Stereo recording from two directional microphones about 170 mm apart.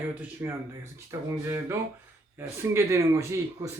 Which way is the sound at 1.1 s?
20° right (ahead or behind).